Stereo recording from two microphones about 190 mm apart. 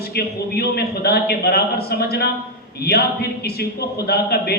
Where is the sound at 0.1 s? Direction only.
55° left (ahead or behind).